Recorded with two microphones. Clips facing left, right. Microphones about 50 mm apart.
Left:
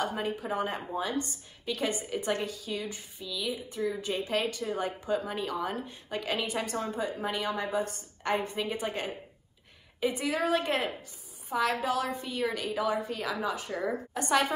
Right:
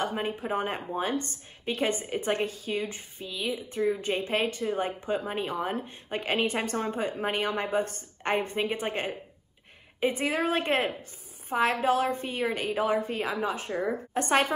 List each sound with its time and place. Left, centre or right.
0.0 s a woman's voice: right